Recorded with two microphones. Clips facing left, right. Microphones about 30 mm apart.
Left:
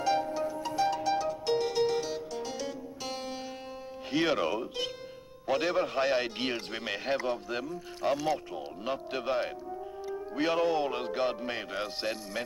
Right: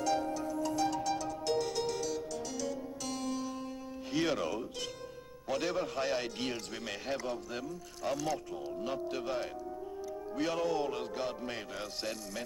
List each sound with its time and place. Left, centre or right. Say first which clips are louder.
0.0 s music: left 4 dB; left
4.1 s a man's voice: left 4 dB; left